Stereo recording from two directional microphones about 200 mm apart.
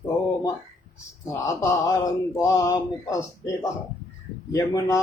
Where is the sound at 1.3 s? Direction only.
15° left (ahead or behind).